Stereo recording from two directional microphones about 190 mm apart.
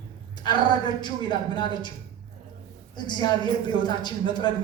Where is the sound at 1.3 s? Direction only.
25° left (ahead or behind).